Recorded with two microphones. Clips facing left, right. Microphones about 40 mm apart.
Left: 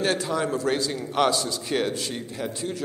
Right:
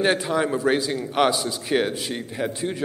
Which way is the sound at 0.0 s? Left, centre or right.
Right.